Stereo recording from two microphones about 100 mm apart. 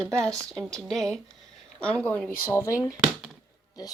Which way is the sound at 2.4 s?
25° left (ahead or behind).